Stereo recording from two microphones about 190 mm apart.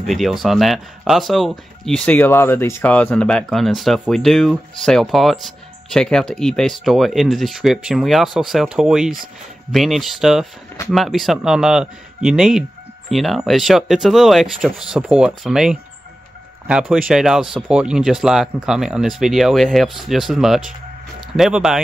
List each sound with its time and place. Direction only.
0.0 s speech: centre (ahead or behind)